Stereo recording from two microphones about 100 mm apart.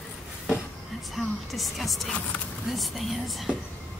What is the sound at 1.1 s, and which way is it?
A woman's voice, centre (ahead or behind).